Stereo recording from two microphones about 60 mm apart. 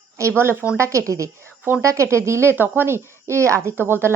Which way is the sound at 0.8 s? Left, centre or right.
Right.